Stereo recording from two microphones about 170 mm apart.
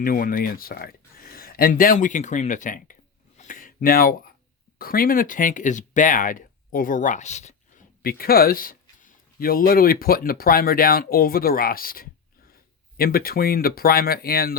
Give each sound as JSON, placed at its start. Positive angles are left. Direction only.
{"t": 0.0, "sound": "speech", "side_deg": 55}
{"t": 8.0, "sound": "a man's voice", "side_deg": 60}